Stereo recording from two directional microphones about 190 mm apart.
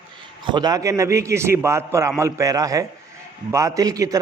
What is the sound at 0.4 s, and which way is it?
A man's voice, 20° right (ahead or behind).